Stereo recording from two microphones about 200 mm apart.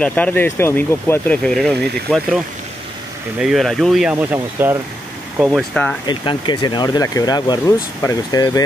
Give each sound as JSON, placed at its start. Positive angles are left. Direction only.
{"t": 0.0, "sound": "speech", "side_deg": 10}
{"t": 6.0, "sound": "speech", "side_deg": 25}